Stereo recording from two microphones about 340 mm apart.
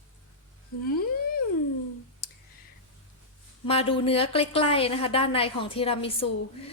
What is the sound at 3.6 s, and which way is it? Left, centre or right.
A woman's voice, centre.